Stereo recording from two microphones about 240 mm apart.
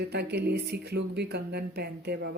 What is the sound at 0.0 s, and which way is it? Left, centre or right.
Speech, right.